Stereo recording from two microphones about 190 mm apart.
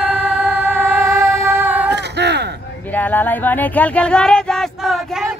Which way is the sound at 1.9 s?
65° right (ahead or behind).